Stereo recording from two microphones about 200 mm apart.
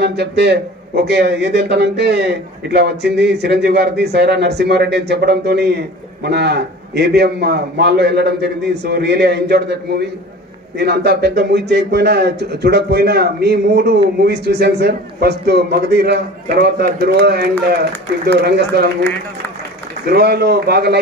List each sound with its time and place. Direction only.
0.0 s a man's voice: 55° right (ahead or behind)
20.1 s a man's voice: 55° right (ahead or behind)